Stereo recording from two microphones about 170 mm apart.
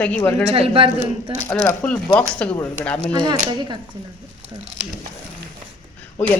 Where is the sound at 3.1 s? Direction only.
25° right (ahead or behind).